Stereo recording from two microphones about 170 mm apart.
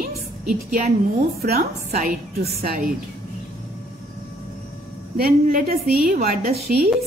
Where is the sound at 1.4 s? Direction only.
65° right (ahead or behind).